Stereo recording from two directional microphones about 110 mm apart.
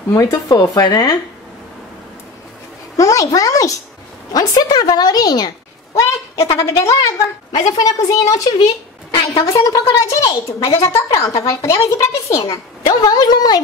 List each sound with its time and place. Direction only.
0.1 s a woman's voice: 30° left (ahead or behind)
3.0 s a woman's voice: 30° left (ahead or behind)
6.5 s a woman's voice: 25° left (ahead or behind)
7.5 s a woman's voice: 40° left (ahead or behind)
12.8 s a woman's voice: 40° left (ahead or behind)